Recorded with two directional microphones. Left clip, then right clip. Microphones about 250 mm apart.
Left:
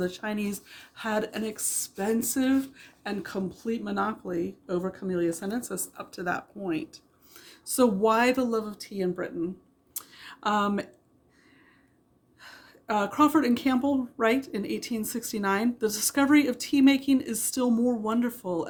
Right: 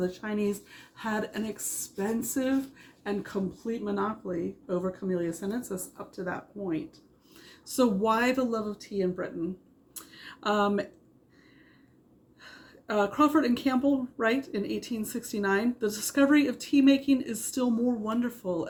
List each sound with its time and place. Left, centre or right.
0.0 s a woman's voice: left
7.3 s a woman's voice: left
9.9 s a sound: left
12.4 s a woman's voice: left